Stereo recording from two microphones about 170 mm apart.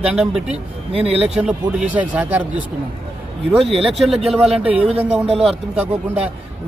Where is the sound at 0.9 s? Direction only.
35° right (ahead or behind).